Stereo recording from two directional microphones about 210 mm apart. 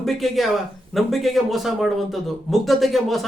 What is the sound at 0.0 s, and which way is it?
Speech, centre (ahead or behind).